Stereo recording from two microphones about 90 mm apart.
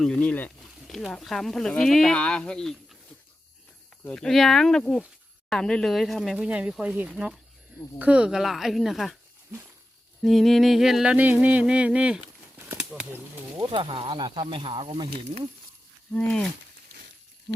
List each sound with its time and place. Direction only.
0.0 s speech: 10° left (ahead or behind)
0.9 s speech: 5° left (ahead or behind)
4.0 s speech: 10° left (ahead or behind); by 7.1 s 15° right (ahead or behind)
7.1 s a sound: 5° right (ahead or behind)
7.9 s speech: 15° right (ahead or behind)
10.2 s a sound: centre (ahead or behind)
12.7 s speech: 15° right (ahead or behind)
13.6 s speech: 80° right
14.2 s speech: 60° right (ahead or behind); by 15.2 s 75° right (ahead or behind)
16.1 s speech: 10° left (ahead or behind)